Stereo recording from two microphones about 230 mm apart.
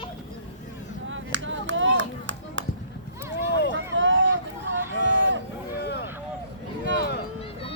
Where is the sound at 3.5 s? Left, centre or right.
Left.